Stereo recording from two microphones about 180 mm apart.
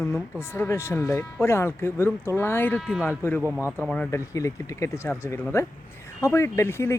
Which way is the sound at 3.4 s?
10° right (ahead or behind).